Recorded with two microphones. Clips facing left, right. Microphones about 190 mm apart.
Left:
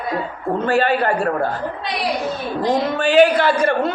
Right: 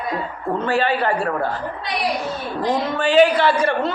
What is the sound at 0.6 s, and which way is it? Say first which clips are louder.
Speech: left 3 dB; 45° left (ahead or behind).